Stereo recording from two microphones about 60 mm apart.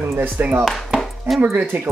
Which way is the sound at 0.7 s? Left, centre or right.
Centre.